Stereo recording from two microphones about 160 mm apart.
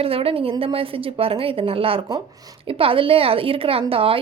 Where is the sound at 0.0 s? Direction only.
35° right (ahead or behind).